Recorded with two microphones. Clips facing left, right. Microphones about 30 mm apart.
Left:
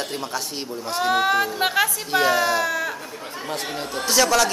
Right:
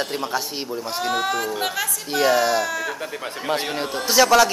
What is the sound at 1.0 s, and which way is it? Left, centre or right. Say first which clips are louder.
Speech: left 4 dB; centre.